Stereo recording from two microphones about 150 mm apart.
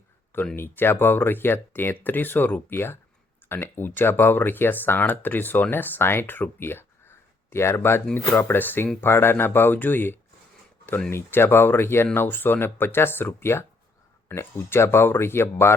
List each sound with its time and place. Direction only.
0.5 s speech: 15° left (ahead or behind)